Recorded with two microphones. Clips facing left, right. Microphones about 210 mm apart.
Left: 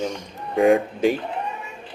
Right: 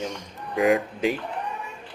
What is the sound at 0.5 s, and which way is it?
Speech, 30° left (ahead or behind).